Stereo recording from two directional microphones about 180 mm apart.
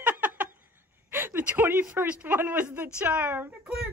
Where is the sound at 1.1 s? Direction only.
10° right (ahead or behind).